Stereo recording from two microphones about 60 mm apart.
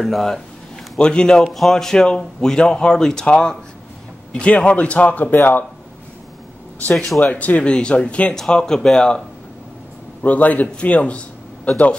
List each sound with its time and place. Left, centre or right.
0.0 s a man's voice: centre; by 5.2 s left
5.2 s speech: left
6.9 s a man's voice: centre
7.2 s a man's voice: left
10.2 s a man's voice: left